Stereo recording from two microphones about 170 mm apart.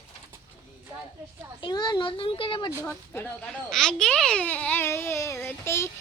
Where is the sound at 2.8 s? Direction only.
10° left (ahead or behind).